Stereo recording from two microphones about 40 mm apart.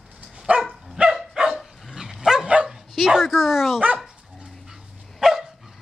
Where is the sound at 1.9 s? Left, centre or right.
Centre.